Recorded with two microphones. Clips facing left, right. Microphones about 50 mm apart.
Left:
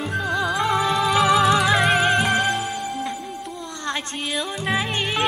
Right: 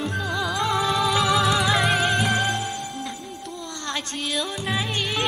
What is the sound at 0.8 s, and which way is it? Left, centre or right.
Music, centre.